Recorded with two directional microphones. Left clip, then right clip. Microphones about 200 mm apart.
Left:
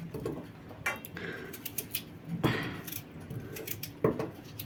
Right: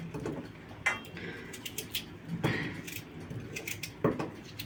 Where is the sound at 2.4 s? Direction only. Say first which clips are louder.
Left 2 dB; 40° left (ahead or behind).